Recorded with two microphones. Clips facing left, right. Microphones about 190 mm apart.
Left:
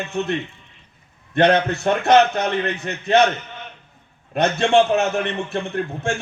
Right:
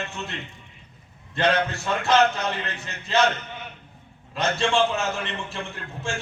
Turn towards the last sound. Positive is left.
turn(degrees=60)  # may be behind; listen again after turning